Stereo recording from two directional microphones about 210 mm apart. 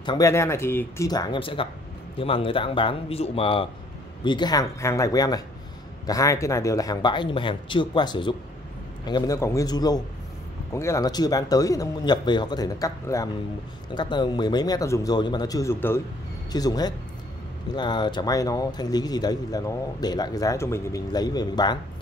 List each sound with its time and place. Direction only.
0.0 s speech: 20° left (ahead or behind)